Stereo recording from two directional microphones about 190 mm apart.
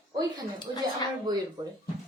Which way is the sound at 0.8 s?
20° right (ahead or behind).